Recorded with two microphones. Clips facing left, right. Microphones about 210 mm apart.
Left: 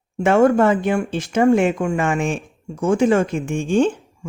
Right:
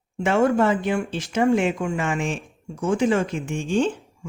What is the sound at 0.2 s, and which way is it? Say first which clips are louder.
Speech: left 5 dB; 50° left (ahead or behind).